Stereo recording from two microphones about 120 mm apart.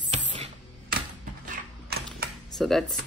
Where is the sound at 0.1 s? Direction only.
65° right (ahead or behind).